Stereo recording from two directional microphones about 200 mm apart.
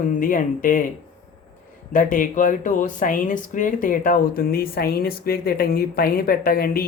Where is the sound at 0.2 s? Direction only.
45° left (ahead or behind).